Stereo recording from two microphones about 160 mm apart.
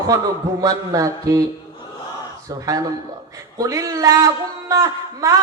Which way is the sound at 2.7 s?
20° right (ahead or behind).